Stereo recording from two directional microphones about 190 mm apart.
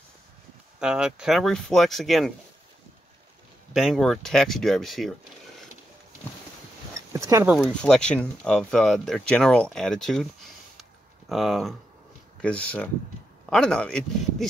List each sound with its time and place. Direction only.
0.7 s speech: 5° right (ahead or behind)
3.7 s speech: centre (ahead or behind)
6.9 s a sound: 15° right (ahead or behind)
7.5 s speech: centre (ahead or behind)
10.8 s a sound: centre (ahead or behind)
12.4 s speech: 5° left (ahead or behind)